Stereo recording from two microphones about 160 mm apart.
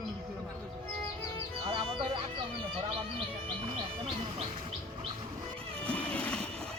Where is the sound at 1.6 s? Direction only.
35° right (ahead or behind).